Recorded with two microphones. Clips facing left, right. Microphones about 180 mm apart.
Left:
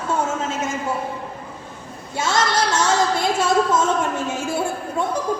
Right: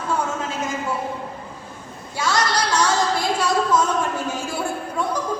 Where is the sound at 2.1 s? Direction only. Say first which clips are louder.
Left 1 dB; 25° left (ahead or behind).